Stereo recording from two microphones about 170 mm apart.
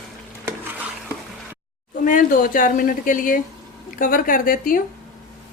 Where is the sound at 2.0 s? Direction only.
55° left (ahead or behind).